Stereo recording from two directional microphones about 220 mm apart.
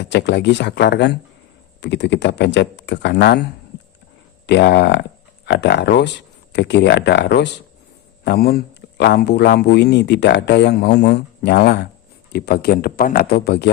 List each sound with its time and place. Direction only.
0.0 s a man's voice: 50° left (ahead or behind)
4.4 s a man's voice: 50° left (ahead or behind)